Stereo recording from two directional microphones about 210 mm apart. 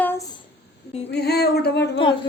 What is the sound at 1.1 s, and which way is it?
Singing, 50° left (ahead or behind).